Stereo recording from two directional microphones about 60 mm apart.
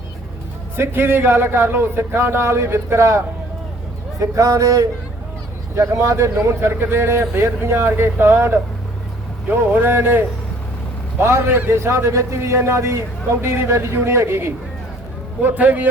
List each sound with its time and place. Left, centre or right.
0.8 s speech: right
4.2 s a man's voice: right
5.7 s speech: right
11.7 s speech: right
15.4 s a man's voice: right